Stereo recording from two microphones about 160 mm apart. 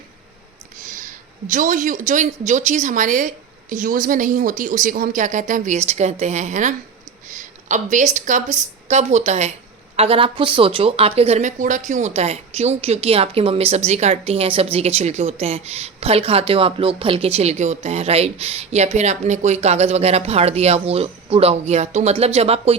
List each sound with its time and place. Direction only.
0.9 s a woman's voice: 55° right (ahead or behind); by 22.8 s 40° right (ahead or behind)